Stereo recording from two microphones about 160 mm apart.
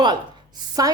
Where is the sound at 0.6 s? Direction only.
25° right (ahead or behind).